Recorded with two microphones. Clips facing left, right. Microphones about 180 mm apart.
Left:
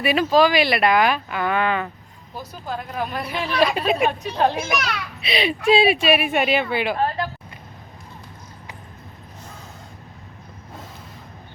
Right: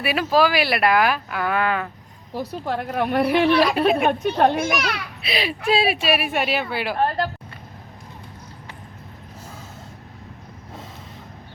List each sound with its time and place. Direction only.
0.0 s a child's voice: 5° right (ahead or behind)
2.3 s a woman's voice: 65° right (ahead or behind)
4.8 s a child's voice: centre (ahead or behind)